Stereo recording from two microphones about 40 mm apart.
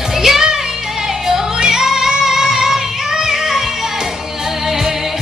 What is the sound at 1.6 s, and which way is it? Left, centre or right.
Music, centre.